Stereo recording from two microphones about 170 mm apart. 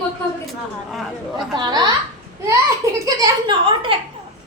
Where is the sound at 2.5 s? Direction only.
20° right (ahead or behind).